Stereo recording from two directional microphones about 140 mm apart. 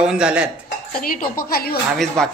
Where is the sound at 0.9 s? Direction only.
90° left.